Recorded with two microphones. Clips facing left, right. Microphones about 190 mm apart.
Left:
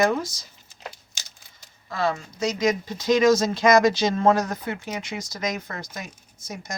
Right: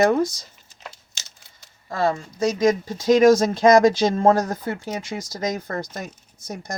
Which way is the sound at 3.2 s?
55° right (ahead or behind).